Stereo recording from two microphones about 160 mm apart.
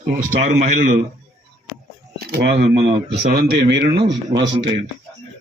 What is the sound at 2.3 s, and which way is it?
Speech, 90° right.